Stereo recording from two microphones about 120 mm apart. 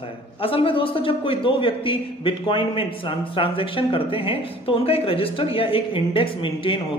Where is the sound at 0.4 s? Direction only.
50° left (ahead or behind).